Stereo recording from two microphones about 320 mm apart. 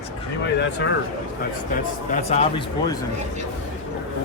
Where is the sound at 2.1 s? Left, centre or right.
Left.